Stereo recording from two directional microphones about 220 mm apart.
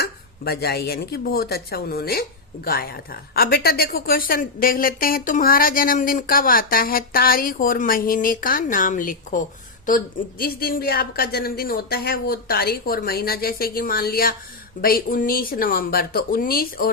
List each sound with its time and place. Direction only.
0.0 s a woman's voice: 45° left (ahead or behind)